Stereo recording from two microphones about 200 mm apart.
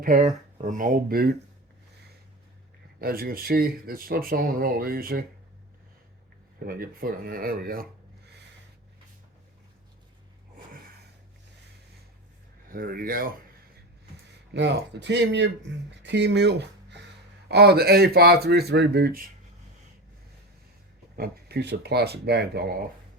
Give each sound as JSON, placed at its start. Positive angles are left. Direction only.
{"t": 0.0, "sound": "speech", "side_deg": -40}
{"t": 3.0, "sound": "speech", "side_deg": -45}
{"t": 6.7, "sound": "speech", "side_deg": -45}
{"t": 12.6, "sound": "speech", "side_deg": -45}
{"t": 14.5, "sound": "speech", "side_deg": -60}
{"t": 21.2, "sound": "speech", "side_deg": -55}